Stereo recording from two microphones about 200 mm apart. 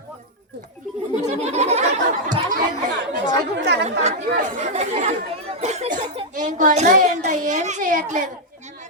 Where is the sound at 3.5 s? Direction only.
55° right (ahead or behind).